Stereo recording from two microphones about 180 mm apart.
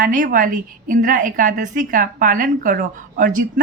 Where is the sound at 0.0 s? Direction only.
50° right (ahead or behind).